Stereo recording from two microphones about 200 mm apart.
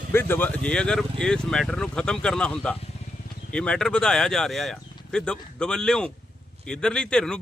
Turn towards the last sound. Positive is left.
turn(degrees=5)  # may be behind; listen again after turning